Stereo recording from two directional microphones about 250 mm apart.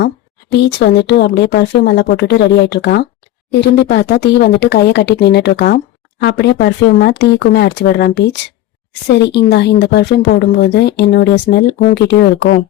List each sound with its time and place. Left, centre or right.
0.5 s speech: left